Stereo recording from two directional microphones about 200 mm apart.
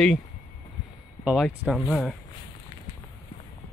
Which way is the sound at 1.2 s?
Centre (ahead or behind).